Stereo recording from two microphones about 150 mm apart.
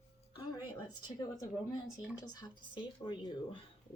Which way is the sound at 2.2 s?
25° left (ahead or behind).